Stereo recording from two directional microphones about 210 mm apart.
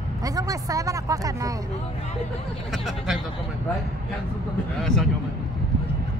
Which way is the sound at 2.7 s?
Centre (ahead or behind).